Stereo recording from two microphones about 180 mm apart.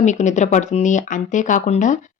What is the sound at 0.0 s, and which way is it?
Speech, 40° left (ahead or behind).